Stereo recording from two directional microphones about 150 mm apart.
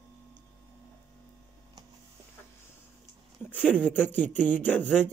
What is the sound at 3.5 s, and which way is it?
Speech, 10° left (ahead or behind).